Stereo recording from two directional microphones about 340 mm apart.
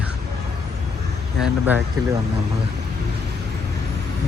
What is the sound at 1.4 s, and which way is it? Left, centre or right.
Speech, centre.